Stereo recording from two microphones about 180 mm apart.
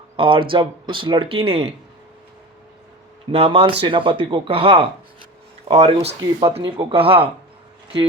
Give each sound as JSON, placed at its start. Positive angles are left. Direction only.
{"t": 0.2, "sound": "speech", "side_deg": -30}
{"t": 3.3, "sound": "speech", "side_deg": -30}